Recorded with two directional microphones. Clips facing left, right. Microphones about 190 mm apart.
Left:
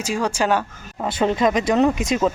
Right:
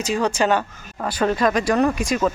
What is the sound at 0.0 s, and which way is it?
Speech, 10° left (ahead or behind).